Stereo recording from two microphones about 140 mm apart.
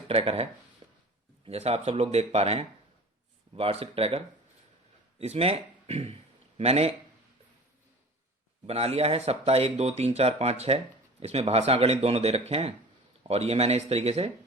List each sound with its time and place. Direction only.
0.1 s speech: 40° right (ahead or behind)
0.8 s a sound: 30° right (ahead or behind)
1.5 s speech: 50° right (ahead or behind)
5.2 s speech: 45° right (ahead or behind)
8.6 s speech: 45° right (ahead or behind)